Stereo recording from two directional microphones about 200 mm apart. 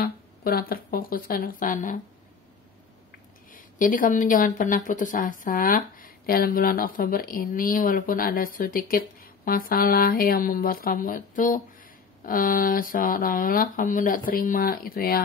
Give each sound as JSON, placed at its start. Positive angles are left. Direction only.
{"t": 0.0, "sound": "a woman's voice", "side_deg": 50}
{"t": 3.5, "sound": "a woman's voice", "side_deg": 45}